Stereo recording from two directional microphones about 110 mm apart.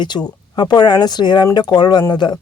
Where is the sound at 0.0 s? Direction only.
40° left (ahead or behind).